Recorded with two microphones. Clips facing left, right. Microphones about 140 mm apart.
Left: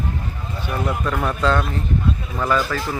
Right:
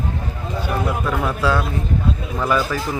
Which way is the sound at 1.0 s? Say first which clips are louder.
Even; 5° right (ahead or behind).